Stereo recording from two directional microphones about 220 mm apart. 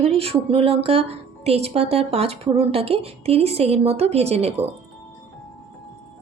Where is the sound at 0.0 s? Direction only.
25° right (ahead or behind).